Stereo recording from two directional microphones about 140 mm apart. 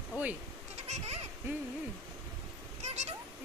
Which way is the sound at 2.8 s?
50° right (ahead or behind).